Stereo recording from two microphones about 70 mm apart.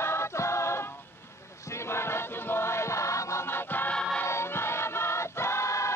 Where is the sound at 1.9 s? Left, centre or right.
Left.